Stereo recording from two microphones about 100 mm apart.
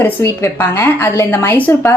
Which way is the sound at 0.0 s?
25° left (ahead or behind).